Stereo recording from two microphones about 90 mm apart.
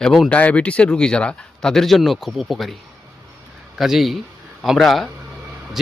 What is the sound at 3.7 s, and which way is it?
Speech, 5° right (ahead or behind).